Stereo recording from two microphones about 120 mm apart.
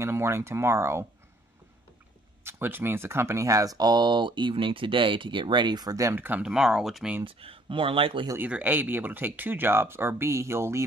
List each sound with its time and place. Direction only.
0.0 s speech: 20° right (ahead or behind)
2.4 s speech: 20° right (ahead or behind)
6.4 s speech: 5° right (ahead or behind)
7.2 s speech: 50° right (ahead or behind)
8.4 s speech: 15° right (ahead or behind)